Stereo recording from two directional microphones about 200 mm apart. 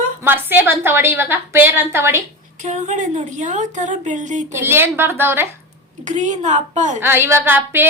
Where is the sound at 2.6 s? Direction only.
35° right (ahead or behind).